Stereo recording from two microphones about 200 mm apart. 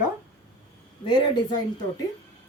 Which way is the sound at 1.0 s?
25° left (ahead or behind).